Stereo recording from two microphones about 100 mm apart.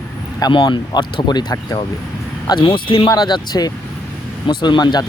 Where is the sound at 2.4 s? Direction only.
50° left (ahead or behind).